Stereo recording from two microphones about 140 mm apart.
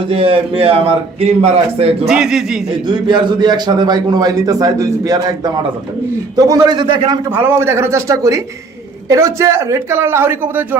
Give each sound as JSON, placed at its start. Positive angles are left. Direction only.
{"t": 0.1, "sound": "a man's voice", "side_deg": -40}
{"t": 2.0, "sound": "a man's voice", "side_deg": 0}
{"t": 2.8, "sound": "a man's voice", "side_deg": -30}
{"t": 7.3, "sound": "a man's voice", "side_deg": -15}